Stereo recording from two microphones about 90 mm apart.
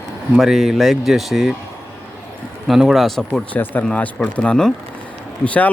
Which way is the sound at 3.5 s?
20° left (ahead or behind).